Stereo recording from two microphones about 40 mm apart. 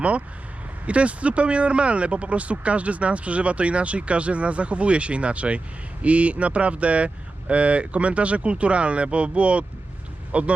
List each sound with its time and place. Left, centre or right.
0.9 s speech: right